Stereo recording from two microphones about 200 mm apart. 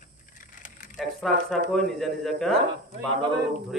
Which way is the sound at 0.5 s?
40° left (ahead or behind).